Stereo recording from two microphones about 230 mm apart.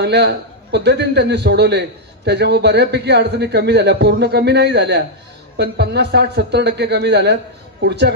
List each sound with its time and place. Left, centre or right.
0.0 s a man's voice: right